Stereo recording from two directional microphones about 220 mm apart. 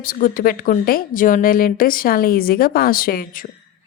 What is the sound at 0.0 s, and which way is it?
A woman's voice, 40° left (ahead or behind).